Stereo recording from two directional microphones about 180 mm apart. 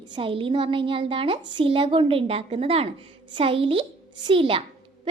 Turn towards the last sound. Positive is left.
turn(degrees=-30)  # may be behind; listen again after turning